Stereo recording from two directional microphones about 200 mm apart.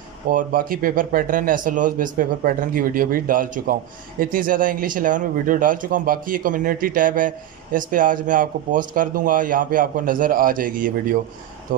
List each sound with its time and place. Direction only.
0.3 s speech: 40° right (ahead or behind)